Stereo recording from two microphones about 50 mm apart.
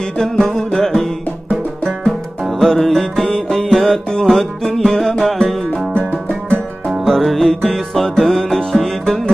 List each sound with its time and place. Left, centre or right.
0.2 s music: centre
2.7 s music: centre
5.9 s music: left
7.1 s music: centre